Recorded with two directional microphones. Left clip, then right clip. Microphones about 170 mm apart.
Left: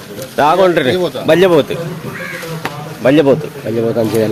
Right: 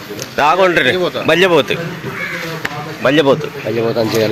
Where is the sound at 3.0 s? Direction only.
30° left (ahead or behind).